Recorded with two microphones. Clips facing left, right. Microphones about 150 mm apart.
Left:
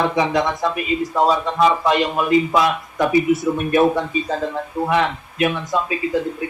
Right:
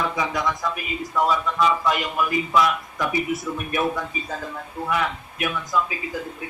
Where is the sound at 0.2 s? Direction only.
25° left (ahead or behind).